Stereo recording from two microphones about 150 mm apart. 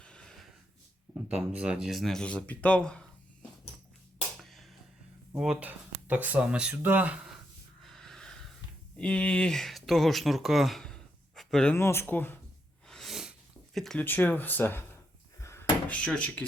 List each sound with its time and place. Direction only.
0.0 s snort: 5° left (ahead or behind)
1.3 s speech: 10° right (ahead or behind)
4.4 s a sound: centre (ahead or behind)
5.4 s speech: 5° right (ahead or behind)
7.9 s a sound: 5° left (ahead or behind)
9.0 s speech: 5° left (ahead or behind)
12.9 s sneeze: centre (ahead or behind)
13.7 s speech: centre (ahead or behind)
15.4 s a sound: 20° left (ahead or behind)
16.0 s speech: 5° left (ahead or behind)